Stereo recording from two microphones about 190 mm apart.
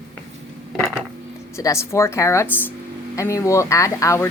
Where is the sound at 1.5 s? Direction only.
15° left (ahead or behind).